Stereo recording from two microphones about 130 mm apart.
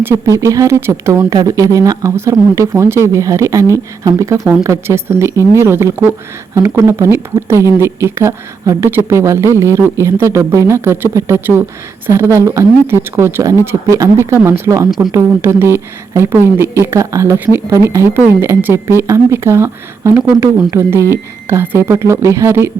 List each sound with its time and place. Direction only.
0.0 s speech: 20° right (ahead or behind)